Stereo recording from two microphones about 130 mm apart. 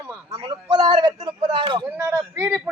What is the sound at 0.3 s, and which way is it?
A man's voice, 40° right (ahead or behind).